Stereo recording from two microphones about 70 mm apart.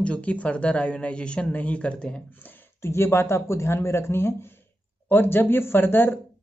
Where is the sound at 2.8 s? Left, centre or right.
Left.